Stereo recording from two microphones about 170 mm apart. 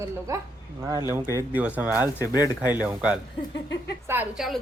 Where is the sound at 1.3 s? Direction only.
10° right (ahead or behind).